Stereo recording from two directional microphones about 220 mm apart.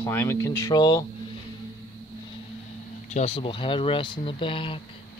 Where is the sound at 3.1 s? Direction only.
25° left (ahead or behind).